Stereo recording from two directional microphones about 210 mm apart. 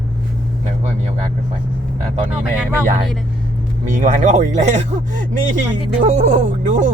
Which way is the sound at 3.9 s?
35° right (ahead or behind).